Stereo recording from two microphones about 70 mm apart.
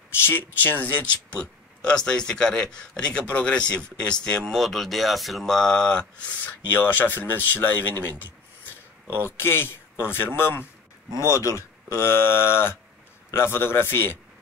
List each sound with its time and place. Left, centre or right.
0.2 s speech: left; by 6.2 s centre
6.4 s speech: left
9.0 s speech: right
9.4 s speech: left
11.1 s speech: left